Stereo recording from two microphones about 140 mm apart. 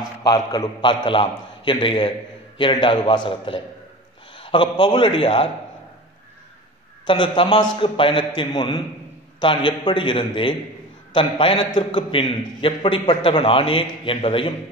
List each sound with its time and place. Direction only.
0.2 s a man's voice: 30° left (ahead or behind)
7.1 s a man's voice: 35° left (ahead or behind)